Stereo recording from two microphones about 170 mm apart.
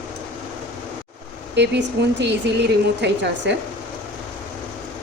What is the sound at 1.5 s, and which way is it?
Speech, 85° right.